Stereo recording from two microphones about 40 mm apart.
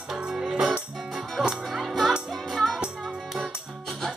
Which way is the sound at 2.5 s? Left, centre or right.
Centre.